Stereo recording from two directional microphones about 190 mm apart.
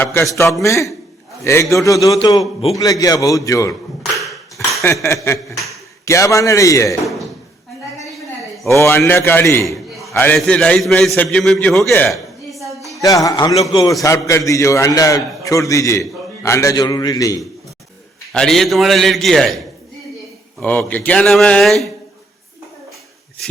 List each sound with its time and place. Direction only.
0.0 s a man's voice: 10° left (ahead or behind)
4.6 s a sound: 15° left (ahead or behind)
5.0 s a man's voice: 15° left (ahead or behind)
8.6 s a man's voice: 15° left (ahead or behind)
9.7 s a man's voice: centre (ahead or behind)
12.5 s a sound: centre (ahead or behind)
13.0 s a man's voice: 20° left (ahead or behind)
18.3 s a man's voice: centre (ahead or behind)